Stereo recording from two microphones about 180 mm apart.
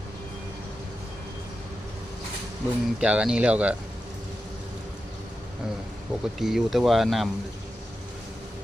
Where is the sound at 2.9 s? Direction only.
5° right (ahead or behind).